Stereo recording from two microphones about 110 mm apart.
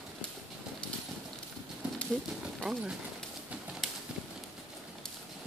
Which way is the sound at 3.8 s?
5° left (ahead or behind).